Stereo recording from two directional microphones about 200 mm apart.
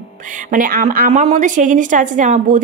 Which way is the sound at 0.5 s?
45° right (ahead or behind).